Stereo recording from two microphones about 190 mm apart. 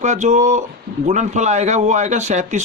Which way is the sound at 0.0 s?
40° right (ahead or behind).